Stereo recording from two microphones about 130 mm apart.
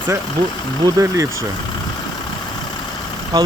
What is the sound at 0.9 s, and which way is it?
Speech, 25° right (ahead or behind).